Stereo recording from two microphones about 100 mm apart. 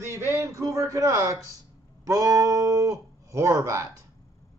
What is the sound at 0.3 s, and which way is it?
Speech, 25° right (ahead or behind).